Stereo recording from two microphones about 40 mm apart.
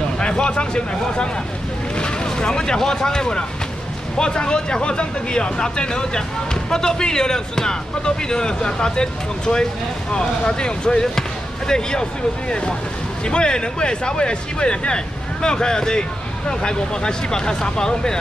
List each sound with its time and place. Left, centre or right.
0.2 s speech: left